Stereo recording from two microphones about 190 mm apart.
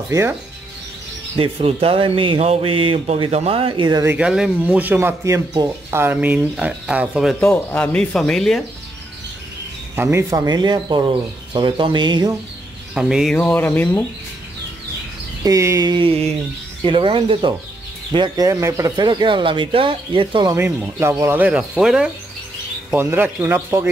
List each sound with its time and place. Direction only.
0.1 s speech: 15° right (ahead or behind)
1.3 s speech: 30° right (ahead or behind); by 7.3 s 5° right (ahead or behind)
7.3 s speech: 10° left (ahead or behind)
9.9 s speech: 15° right (ahead or behind)
12.9 s speech: centre (ahead or behind)
15.4 s speech: 15° right (ahead or behind)
20.5 s speech: 10° right (ahead or behind)